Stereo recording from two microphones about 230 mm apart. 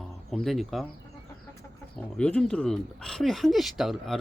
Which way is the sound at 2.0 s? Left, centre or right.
Centre.